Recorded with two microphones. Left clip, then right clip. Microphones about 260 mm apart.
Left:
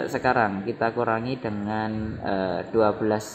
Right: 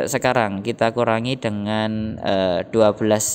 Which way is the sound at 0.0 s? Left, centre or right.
Right.